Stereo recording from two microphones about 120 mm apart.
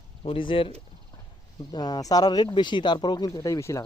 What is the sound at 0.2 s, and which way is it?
Speech, 45° left (ahead or behind).